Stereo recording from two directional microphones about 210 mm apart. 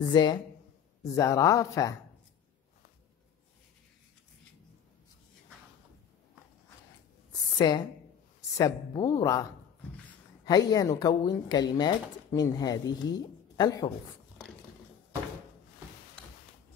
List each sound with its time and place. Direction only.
0.1 s a woman's voice: 20° left (ahead or behind)
7.5 s a woman's voice: 20° left (ahead or behind)